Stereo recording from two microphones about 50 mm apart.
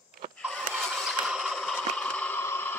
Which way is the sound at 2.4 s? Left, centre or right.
Left.